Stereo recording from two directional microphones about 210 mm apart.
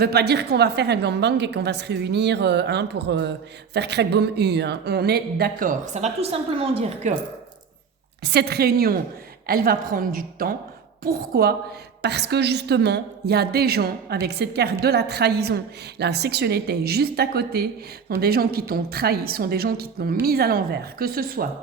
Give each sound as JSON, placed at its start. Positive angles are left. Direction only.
{"t": 0.0, "sound": "a woman's voice", "side_deg": -50}
{"t": 8.2, "sound": "a woman's voice", "side_deg": -50}